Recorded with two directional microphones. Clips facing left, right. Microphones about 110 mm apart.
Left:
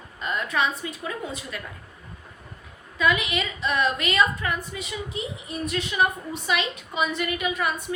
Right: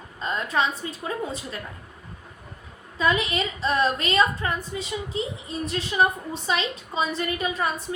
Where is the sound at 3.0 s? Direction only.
35° right (ahead or behind).